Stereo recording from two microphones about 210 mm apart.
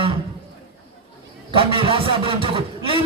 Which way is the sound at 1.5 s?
25° right (ahead or behind).